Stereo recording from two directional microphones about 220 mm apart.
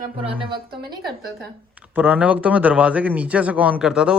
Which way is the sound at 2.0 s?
5° right (ahead or behind).